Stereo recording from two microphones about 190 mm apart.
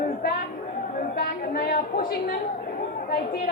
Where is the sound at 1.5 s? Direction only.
50° left (ahead or behind).